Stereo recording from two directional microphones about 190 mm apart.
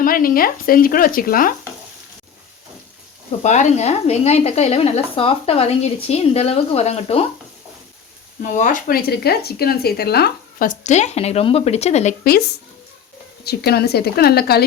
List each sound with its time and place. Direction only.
0.0 s speech: 50° left (ahead or behind)
3.4 s speech: 40° left (ahead or behind)
8.4 s speech: 40° left (ahead or behind)
12.2 s a woman's voice: 50° left (ahead or behind)